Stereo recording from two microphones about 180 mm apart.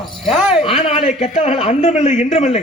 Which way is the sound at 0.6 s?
30° left (ahead or behind).